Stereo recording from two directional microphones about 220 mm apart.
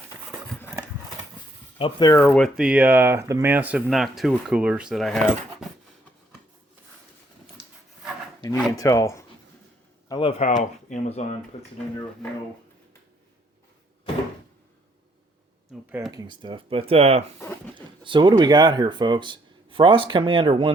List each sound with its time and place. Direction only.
1.8 s speech: 20° left (ahead or behind)
2.2 s speech: 5° left (ahead or behind)
8.7 s speech: 15° left (ahead or behind)
10.1 s speech: 25° left (ahead or behind)
16.1 s speech: 20° right (ahead or behind)